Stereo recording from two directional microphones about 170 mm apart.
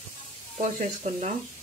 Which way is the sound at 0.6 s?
40° right (ahead or behind).